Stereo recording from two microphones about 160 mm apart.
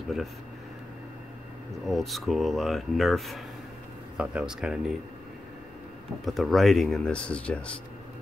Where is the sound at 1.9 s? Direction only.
Centre (ahead or behind).